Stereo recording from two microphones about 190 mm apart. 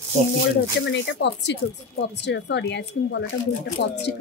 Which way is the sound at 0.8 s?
70° left (ahead or behind).